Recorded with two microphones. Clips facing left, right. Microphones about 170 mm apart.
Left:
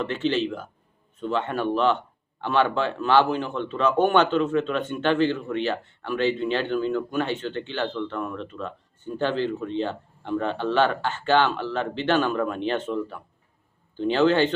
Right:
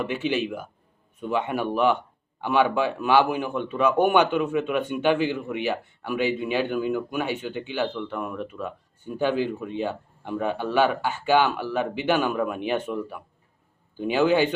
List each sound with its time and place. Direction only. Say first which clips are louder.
0.0 s speech: left 1 dB; 10° right (ahead or behind)